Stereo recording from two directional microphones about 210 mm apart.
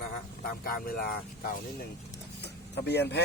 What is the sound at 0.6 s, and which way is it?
Speech, 45° left (ahead or behind).